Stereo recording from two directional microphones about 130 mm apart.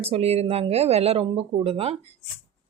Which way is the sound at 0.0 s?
50° right (ahead or behind).